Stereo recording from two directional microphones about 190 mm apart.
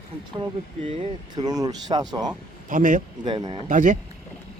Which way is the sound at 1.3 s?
20° right (ahead or behind).